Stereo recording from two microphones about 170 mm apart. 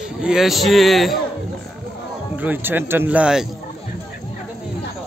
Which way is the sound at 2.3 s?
10° right (ahead or behind).